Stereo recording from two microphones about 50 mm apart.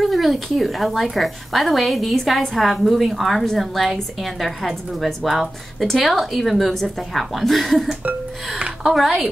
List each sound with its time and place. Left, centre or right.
0.0 s a woman's voice: centre